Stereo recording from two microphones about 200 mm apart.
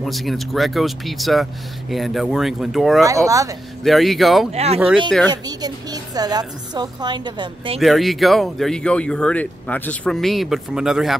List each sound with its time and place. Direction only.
0.0 s speech: centre (ahead or behind)
3.0 s speech: 15° right (ahead or behind)
3.8 s speech: centre (ahead or behind)
4.5 s speech: 30° right (ahead or behind)
5.3 s a woman's voice: 20° right (ahead or behind)
7.8 s speech: centre (ahead or behind)